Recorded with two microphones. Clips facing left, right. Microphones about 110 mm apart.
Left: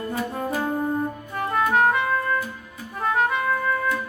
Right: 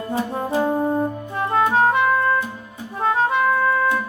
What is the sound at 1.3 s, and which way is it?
Music, 25° right (ahead or behind).